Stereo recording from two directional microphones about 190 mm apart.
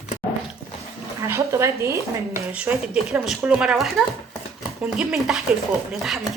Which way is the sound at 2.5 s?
5° right (ahead or behind).